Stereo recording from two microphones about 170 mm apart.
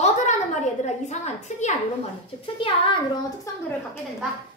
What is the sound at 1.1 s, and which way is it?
Speech, 45° left (ahead or behind).